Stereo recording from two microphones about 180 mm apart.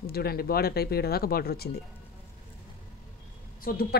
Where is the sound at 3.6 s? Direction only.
55° left (ahead or behind).